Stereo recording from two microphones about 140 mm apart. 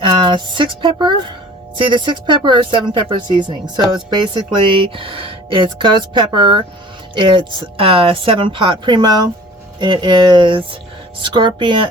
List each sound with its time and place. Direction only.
0.0 s speech: 35° right (ahead or behind)